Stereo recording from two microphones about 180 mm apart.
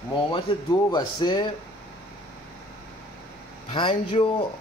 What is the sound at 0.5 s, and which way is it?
Speech, 30° left (ahead or behind).